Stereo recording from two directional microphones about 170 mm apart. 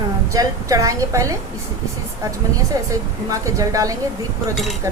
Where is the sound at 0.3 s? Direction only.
20° right (ahead or behind).